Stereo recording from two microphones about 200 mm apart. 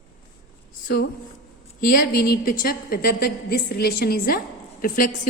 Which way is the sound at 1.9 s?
50° left (ahead or behind).